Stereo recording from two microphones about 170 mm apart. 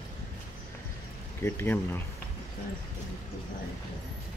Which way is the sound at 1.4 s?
10° left (ahead or behind).